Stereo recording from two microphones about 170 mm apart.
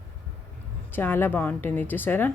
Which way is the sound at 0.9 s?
10° left (ahead or behind).